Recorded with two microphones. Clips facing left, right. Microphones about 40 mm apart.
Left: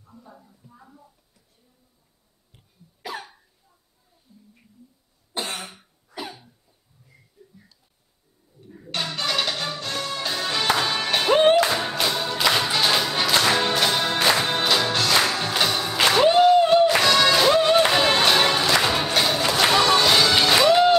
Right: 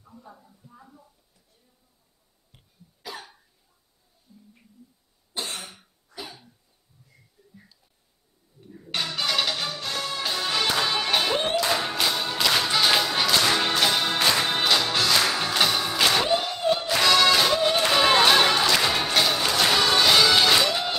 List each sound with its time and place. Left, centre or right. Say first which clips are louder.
0.2 s speech: even; centre
5.3 s cough: left 3 dB; left
5.7 s cough: left 2 dB; centre
7.1 s a sound: left 3 dB; centre
7.5 s a sound: right 1 dB; centre
8.6 s music: left 1 dB; centre
11.4 s music: left 8 dB; left
11.7 s music: left 1 dB; centre
16.0 s music: left 8 dB; centre
18.0 s chatter: even; centre
18.7 s music: left 2 dB; centre
20.5 s music: left 7 dB; left